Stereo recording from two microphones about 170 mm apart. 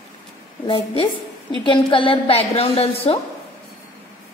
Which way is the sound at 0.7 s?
30° left (ahead or behind).